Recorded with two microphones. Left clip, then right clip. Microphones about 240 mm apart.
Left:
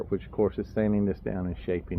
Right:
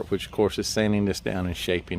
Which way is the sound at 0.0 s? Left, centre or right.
Right.